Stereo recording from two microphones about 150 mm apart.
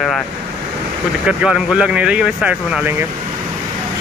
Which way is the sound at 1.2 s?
5° right (ahead or behind).